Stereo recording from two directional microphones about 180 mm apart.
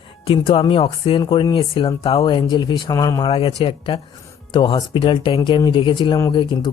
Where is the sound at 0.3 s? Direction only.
30° left (ahead or behind).